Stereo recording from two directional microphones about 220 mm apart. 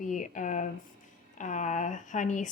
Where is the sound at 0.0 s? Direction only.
35° left (ahead or behind).